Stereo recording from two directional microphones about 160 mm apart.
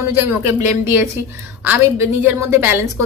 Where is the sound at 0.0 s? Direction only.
15° right (ahead or behind).